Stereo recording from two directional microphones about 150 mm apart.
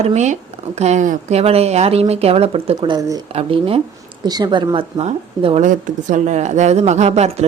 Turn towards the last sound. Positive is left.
turn(degrees=-45)  # may be behind; listen again after turning